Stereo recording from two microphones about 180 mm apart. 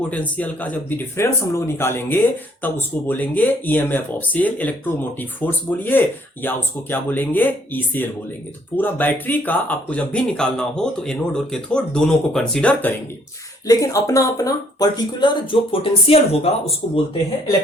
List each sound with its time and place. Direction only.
0.1 s speech: 10° left (ahead or behind)
13.7 s speech: 20° left (ahead or behind); by 17.0 s 35° left (ahead or behind)